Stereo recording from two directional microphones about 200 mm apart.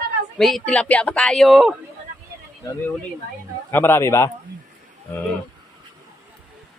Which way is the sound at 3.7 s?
10° left (ahead or behind).